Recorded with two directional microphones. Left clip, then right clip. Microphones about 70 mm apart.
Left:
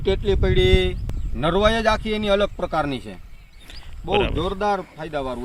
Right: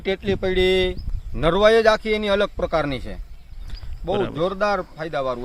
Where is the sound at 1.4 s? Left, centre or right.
Right.